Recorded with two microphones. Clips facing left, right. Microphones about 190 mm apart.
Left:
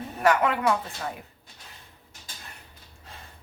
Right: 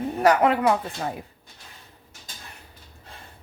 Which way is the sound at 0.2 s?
35° right (ahead or behind).